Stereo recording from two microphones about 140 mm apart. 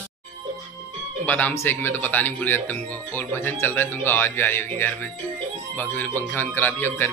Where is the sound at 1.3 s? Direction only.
10° left (ahead or behind).